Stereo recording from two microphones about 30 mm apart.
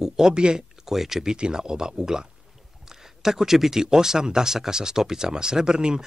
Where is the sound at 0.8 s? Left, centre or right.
Centre.